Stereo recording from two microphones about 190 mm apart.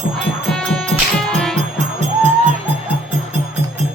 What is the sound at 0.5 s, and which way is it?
Music, centre (ahead or behind).